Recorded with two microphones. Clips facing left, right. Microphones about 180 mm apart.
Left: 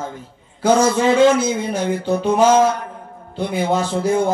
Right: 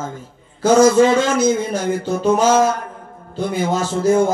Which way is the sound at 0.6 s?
45° right (ahead or behind).